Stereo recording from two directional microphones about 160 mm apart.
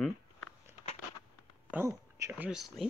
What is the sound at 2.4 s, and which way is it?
Speech, centre (ahead or behind).